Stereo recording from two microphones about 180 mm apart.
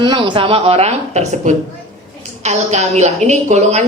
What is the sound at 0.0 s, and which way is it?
A woman's voice, 30° right (ahead or behind).